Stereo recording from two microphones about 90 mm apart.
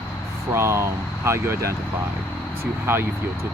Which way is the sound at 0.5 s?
30° right (ahead or behind).